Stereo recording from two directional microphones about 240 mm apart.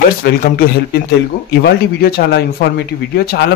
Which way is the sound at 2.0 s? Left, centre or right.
Left.